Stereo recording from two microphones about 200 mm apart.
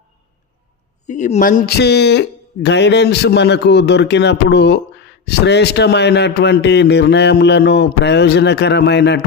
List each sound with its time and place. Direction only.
1.0 s a man's voice: 35° left (ahead or behind); by 9.2 s 60° left (ahead or behind)